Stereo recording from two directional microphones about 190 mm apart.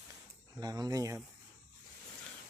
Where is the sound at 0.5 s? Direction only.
20° right (ahead or behind).